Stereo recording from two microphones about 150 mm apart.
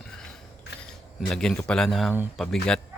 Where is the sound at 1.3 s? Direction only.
5° left (ahead or behind).